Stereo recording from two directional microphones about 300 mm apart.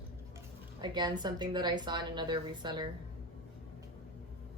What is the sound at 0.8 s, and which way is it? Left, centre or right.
A woman's voice, centre.